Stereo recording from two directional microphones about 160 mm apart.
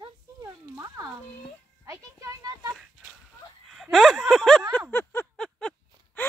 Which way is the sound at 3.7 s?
Centre (ahead or behind).